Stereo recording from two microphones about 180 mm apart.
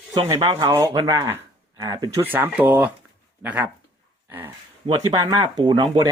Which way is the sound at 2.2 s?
10° right (ahead or behind).